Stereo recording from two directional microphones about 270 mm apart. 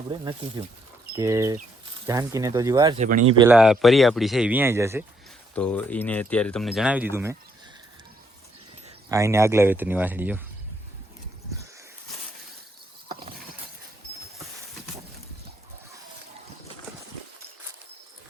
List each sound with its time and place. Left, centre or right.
0.1 s speech: centre
3.0 s speech: right
3.3 s speech: centre
5.5 s speech: centre
9.0 s speech: centre